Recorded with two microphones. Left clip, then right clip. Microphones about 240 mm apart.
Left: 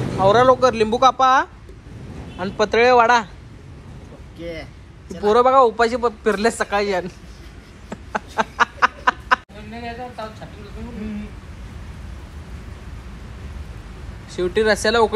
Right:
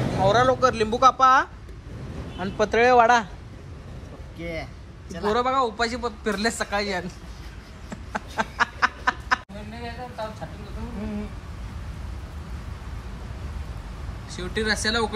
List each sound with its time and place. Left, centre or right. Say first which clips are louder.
0.2 s a man's voice: left 6 dB; centre
5.1 s a man's voice: left 9 dB; centre
7.9 s a sound: left 6 dB; centre
14.3 s a man's voice: left 8 dB; centre